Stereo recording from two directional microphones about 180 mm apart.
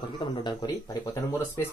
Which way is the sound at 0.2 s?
25° left (ahead or behind).